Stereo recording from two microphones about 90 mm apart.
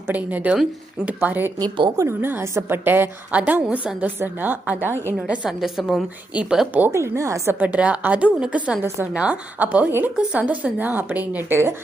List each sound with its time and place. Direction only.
0.1 s a woman's voice: 20° right (ahead or behind)
1.2 s a woman's voice: 20° right (ahead or behind)
5.1 s a woman's voice: 5° right (ahead or behind)
6.9 s a woman's voice: 30° right (ahead or behind)
7.6 s a woman's voice: 15° right (ahead or behind)